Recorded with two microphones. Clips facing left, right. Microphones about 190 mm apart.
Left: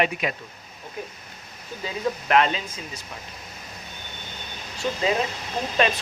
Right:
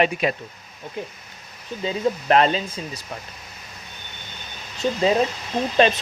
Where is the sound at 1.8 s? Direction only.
35° right (ahead or behind).